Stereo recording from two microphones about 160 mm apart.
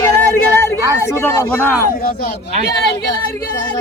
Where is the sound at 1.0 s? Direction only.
15° left (ahead or behind).